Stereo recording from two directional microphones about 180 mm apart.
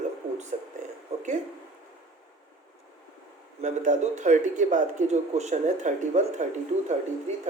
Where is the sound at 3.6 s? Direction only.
40° right (ahead or behind).